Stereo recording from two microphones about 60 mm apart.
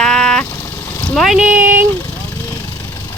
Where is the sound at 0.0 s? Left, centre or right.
Centre.